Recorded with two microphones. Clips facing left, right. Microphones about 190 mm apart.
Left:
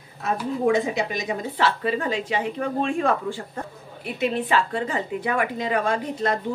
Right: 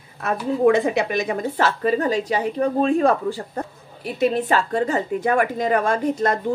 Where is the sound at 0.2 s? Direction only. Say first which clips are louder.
Right 5 dB; 65° right (ahead or behind).